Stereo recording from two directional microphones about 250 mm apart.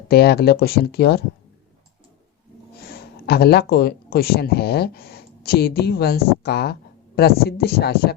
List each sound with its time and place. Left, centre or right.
0.1 s speech: left
2.9 s speech: left